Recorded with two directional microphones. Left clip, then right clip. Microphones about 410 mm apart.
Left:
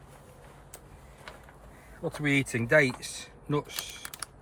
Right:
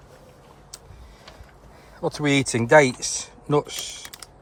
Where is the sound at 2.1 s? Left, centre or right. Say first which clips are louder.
Right 6 dB; centre.